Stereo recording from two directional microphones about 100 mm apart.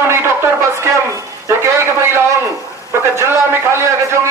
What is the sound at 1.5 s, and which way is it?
A man's voice, 25° right (ahead or behind).